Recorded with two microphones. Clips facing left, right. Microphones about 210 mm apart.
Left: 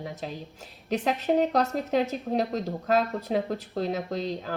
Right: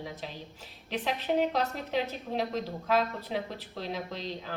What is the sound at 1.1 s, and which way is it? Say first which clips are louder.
A woman's voice: left 4 dB; 45° left (ahead or behind).